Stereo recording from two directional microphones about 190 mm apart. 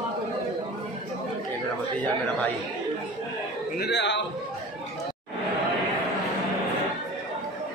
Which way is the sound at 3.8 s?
65° left (ahead or behind).